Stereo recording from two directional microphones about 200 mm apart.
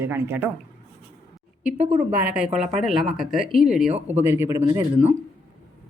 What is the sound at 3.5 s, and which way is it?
Speech, centre (ahead or behind).